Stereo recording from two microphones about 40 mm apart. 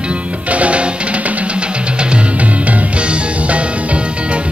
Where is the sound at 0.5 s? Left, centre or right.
Right.